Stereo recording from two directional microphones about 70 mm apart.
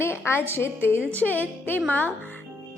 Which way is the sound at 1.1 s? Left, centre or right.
Left.